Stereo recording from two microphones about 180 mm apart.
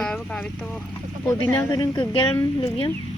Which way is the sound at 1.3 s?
20° left (ahead or behind).